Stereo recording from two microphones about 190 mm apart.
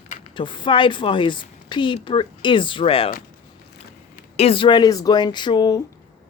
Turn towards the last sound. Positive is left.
turn(degrees=25)  # may be behind; listen again after turning